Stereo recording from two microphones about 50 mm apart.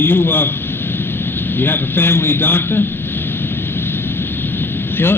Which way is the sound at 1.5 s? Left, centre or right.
Left.